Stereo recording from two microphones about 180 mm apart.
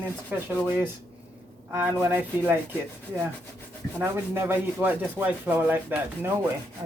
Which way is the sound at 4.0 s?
10° right (ahead or behind).